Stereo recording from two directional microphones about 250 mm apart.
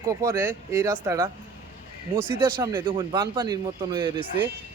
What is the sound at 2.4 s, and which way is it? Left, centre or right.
Speech, centre.